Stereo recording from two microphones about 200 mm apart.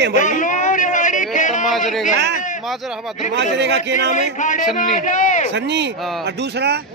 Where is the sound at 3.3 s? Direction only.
60° right (ahead or behind).